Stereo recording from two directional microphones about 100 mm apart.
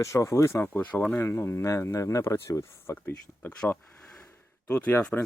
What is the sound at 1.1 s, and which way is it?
Speech, 30° left (ahead or behind).